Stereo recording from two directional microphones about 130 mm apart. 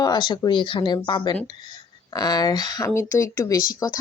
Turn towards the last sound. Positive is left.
turn(degrees=25)  # may be behind; listen again after turning